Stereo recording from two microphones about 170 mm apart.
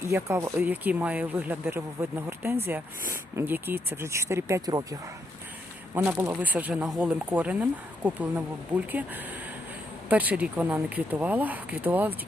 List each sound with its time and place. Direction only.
0.1 s speech: 15° right (ahead or behind)